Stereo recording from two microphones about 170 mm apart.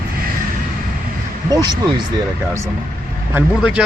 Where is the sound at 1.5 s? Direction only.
25° right (ahead or behind).